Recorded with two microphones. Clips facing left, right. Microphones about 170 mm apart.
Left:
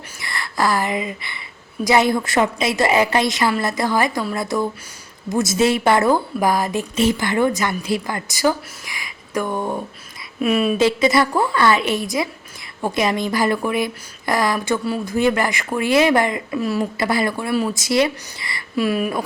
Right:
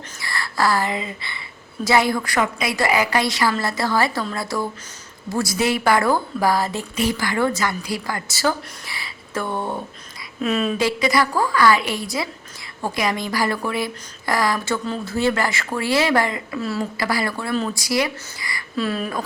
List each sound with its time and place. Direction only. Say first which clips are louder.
0.2 s a woman's voice: left 1 dB; 20° left (ahead or behind)
17.7 s a woman's voice: left 4 dB; 25° left (ahead or behind)
18.8 s speech: left 4 dB; 15° left (ahead or behind)